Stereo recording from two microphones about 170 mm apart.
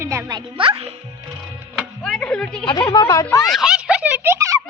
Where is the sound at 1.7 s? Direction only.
Centre (ahead or behind).